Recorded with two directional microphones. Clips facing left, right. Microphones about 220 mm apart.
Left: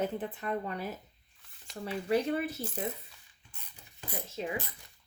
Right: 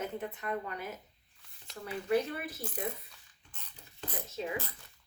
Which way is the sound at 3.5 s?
10° left (ahead or behind).